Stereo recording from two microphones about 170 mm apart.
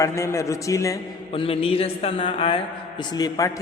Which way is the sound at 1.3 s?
30° left (ahead or behind).